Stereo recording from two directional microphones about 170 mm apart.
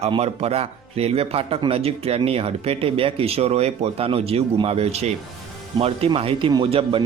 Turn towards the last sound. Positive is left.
turn(degrees=-30)  # may be behind; listen again after turning